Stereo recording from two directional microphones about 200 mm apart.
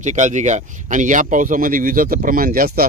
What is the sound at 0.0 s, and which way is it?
Speech, 35° right (ahead or behind).